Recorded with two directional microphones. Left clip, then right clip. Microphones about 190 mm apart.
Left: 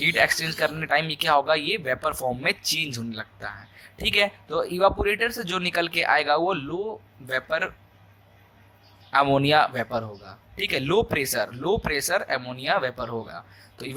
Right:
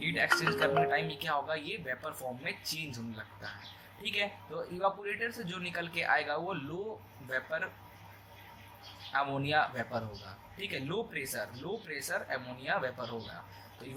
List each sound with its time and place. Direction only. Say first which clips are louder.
0.0 s speech: left 8 dB; 50° left (ahead or behind)
9.1 s speech: left 11 dB; 50° left (ahead or behind)